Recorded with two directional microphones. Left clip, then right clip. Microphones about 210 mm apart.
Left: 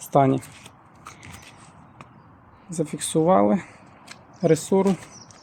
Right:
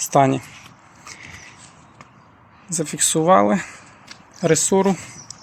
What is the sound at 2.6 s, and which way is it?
Speech, centre (ahead or behind).